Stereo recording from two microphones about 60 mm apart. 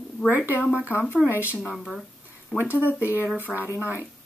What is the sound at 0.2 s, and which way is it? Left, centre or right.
Speech, centre.